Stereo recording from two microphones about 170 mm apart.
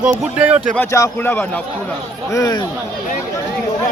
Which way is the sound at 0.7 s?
15° left (ahead or behind).